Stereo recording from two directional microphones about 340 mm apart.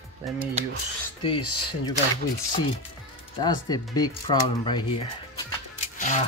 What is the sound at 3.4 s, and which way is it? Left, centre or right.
A man's voice, centre.